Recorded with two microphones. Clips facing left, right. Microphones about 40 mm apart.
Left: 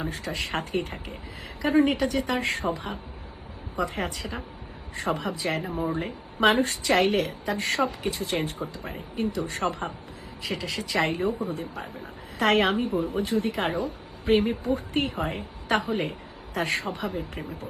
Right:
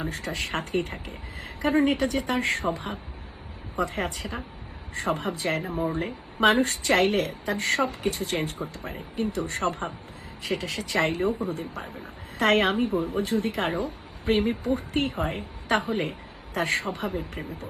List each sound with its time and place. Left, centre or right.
0.1 s a woman's voice: right